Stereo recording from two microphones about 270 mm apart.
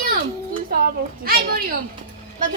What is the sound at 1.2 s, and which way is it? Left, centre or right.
Speech, right.